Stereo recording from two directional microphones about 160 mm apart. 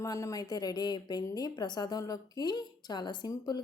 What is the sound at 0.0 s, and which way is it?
A woman's voice, 20° left (ahead or behind).